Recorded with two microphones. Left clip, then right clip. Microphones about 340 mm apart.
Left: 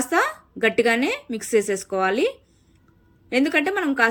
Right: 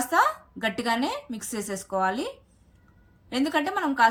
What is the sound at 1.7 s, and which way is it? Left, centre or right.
Speech, right.